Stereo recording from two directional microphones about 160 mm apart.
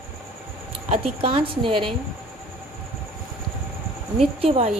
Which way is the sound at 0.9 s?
35° right (ahead or behind).